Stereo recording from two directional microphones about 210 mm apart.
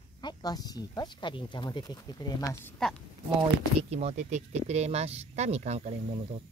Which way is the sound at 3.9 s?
30° right (ahead or behind).